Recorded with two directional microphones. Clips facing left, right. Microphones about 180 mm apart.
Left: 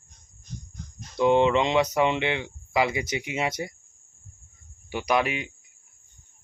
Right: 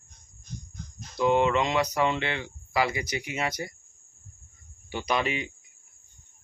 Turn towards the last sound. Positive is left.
turn(degrees=10)  # may be behind; listen again after turning